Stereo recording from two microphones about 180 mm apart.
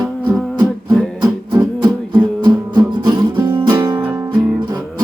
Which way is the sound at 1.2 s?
20° right (ahead or behind).